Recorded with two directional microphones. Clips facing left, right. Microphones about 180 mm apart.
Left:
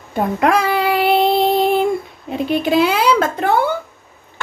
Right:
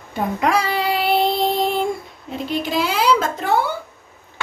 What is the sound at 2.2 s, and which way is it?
Speech, 60° left (ahead or behind).